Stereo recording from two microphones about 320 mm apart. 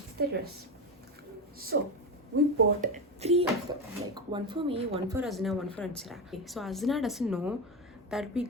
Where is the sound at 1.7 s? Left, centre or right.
Right.